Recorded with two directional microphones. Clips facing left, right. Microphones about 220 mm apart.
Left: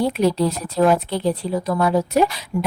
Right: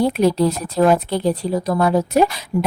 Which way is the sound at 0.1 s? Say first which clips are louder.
Right 2 dB; 45° right (ahead or behind).